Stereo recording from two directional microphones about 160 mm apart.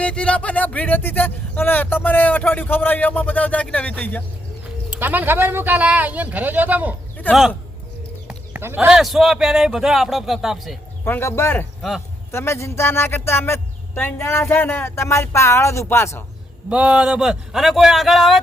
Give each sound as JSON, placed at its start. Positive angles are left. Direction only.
{"t": 0.0, "sound": "speech", "side_deg": 5}
{"t": 4.9, "sound": "speech", "side_deg": -10}
{"t": 7.2, "sound": "speech", "side_deg": 10}
{"t": 8.3, "sound": "speech", "side_deg": -10}
{"t": 11.0, "sound": "speech", "side_deg": 15}
{"t": 11.8, "sound": "speech", "side_deg": 0}
{"t": 12.3, "sound": "speech", "side_deg": 15}
{"t": 16.6, "sound": "speech", "side_deg": -5}